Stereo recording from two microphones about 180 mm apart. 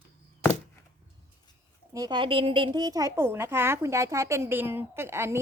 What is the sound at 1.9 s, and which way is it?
Speech, 20° right (ahead or behind).